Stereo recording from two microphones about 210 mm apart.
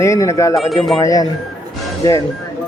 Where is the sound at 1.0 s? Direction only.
15° left (ahead or behind).